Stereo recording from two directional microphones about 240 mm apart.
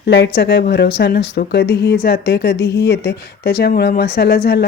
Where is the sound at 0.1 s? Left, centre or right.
Left.